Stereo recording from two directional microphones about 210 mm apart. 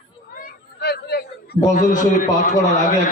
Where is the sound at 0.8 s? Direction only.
50° left (ahead or behind).